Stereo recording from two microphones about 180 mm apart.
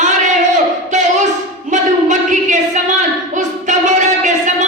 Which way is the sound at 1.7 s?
45° right (ahead or behind).